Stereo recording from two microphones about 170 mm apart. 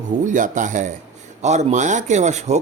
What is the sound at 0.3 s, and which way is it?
Speech, 50° right (ahead or behind).